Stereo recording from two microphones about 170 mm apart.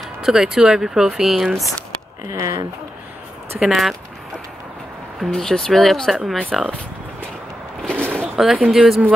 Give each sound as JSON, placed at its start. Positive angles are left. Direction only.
{"t": 0.2, "sound": "speech", "side_deg": -5}
{"t": 2.3, "sound": "speech", "side_deg": -20}
{"t": 3.5, "sound": "speech", "side_deg": 0}
{"t": 5.2, "sound": "speech", "side_deg": 5}
{"t": 8.0, "sound": "a sound", "side_deg": -10}
{"t": 8.4, "sound": "speech", "side_deg": 0}